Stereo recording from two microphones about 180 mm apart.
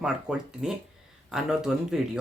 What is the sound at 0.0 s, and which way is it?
Speech, 5° right (ahead or behind).